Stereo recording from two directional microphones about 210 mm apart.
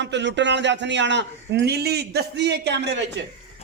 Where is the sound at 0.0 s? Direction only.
55° right (ahead or behind).